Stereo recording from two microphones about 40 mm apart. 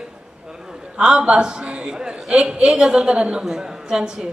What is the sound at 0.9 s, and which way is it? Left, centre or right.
A man's voice, centre.